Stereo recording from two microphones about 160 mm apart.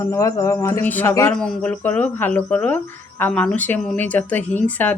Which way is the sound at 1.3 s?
5° left (ahead or behind).